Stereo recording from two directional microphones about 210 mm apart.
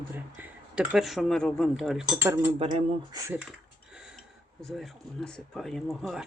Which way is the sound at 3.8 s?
5° right (ahead or behind).